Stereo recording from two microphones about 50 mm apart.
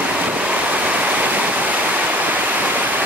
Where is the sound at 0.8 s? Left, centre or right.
Right.